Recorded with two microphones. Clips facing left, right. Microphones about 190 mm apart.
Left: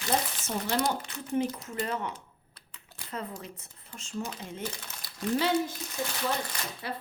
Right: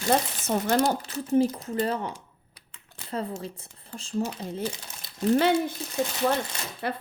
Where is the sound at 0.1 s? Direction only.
55° right (ahead or behind).